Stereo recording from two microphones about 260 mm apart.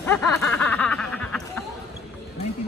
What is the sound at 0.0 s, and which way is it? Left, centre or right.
Snicker, centre.